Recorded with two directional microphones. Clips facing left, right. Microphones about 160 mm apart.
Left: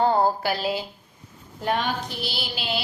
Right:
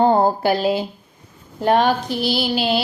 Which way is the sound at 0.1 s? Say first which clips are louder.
Right 6 dB; 50° right (ahead or behind).